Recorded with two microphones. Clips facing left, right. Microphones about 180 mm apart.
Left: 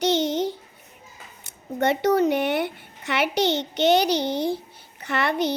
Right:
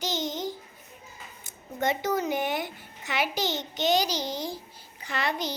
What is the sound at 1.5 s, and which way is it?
A child's voice, 65° left (ahead or behind).